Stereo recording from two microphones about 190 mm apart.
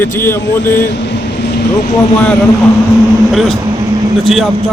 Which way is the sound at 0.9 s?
65° left (ahead or behind).